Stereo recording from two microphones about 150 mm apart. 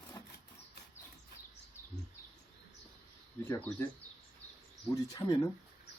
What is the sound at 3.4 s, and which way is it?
Speech, 15° left (ahead or behind).